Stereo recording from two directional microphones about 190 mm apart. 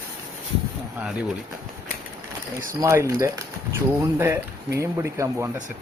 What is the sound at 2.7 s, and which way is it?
Speech, 15° right (ahead or behind).